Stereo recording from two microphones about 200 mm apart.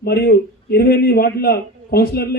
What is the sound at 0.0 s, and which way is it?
A man's voice, 50° left (ahead or behind).